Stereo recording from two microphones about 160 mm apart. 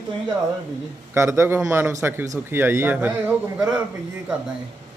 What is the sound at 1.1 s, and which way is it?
A man's voice, 15° right (ahead or behind).